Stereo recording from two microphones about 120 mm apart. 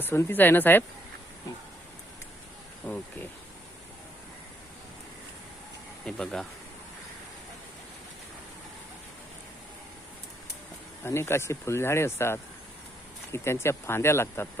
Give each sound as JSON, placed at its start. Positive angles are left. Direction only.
{"t": 0.0, "sound": "speech", "side_deg": 20}
{"t": 2.8, "sound": "speech", "side_deg": 15}
{"t": 6.1, "sound": "speech", "side_deg": 5}
{"t": 11.0, "sound": "speech", "side_deg": 20}